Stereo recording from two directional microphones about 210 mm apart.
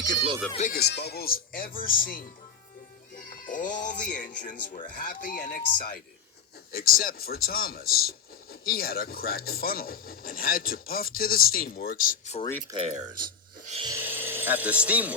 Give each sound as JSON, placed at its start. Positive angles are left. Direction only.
{"t": 0.5, "sound": "speech", "side_deg": 35}
{"t": 0.8, "sound": "speech", "side_deg": 50}
{"t": 3.2, "sound": "speech", "side_deg": 40}
{"t": 12.7, "sound": "speech", "side_deg": -30}
{"t": 13.7, "sound": "filing", "side_deg": -25}
{"t": 13.9, "sound": "speech", "side_deg": -10}